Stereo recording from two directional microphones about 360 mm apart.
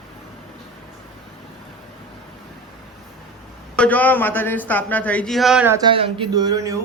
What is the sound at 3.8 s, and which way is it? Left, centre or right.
Speech, centre.